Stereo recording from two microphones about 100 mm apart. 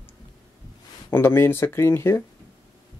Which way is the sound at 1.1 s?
25° left (ahead or behind).